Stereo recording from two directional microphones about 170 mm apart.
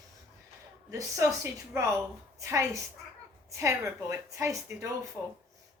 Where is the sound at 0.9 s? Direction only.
15° right (ahead or behind).